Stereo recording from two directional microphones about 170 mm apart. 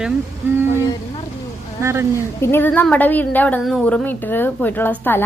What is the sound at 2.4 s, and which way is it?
A woman's voice, 15° left (ahead or behind).